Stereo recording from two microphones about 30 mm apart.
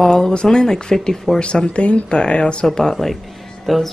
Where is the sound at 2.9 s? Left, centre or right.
Centre.